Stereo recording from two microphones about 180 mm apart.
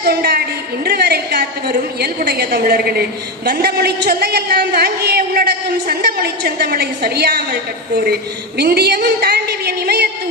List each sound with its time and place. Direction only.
0.1 s a woman's voice: 60° right (ahead or behind)